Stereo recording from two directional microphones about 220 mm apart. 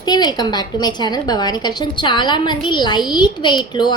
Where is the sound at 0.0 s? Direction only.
20° left (ahead or behind).